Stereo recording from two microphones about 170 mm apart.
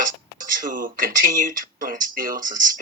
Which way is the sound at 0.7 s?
55° right (ahead or behind).